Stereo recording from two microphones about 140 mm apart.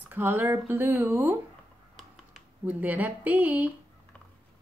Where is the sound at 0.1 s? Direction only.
15° right (ahead or behind).